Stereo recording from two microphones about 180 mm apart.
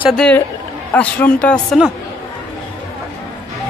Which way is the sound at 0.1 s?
5° left (ahead or behind).